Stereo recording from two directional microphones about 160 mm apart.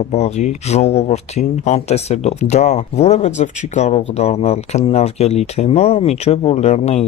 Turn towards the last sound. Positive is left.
turn(degrees=40)  # may be behind; listen again after turning